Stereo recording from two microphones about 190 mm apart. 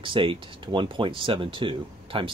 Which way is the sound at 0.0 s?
25° right (ahead or behind).